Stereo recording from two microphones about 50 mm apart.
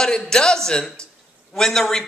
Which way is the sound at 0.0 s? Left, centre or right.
Centre.